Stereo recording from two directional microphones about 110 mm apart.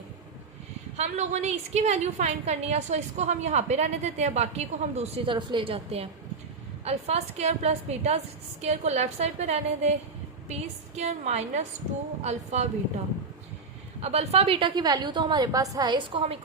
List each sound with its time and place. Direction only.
0.9 s a woman's voice: 90° right
5.2 s a woman's voice: 50° right (ahead or behind)
6.8 s a woman's voice: 80° right
8.6 s a woman's voice: 90° right
14.0 s a woman's voice: 70° right (ahead or behind)
14.8 s a woman's voice: 35° right (ahead or behind); by 16.4 s 55° right (ahead or behind)